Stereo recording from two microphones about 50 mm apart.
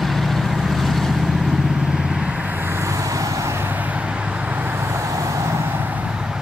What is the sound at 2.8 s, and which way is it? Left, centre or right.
Vehicle, right.